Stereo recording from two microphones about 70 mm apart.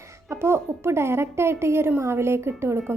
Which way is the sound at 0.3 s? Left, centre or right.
Right.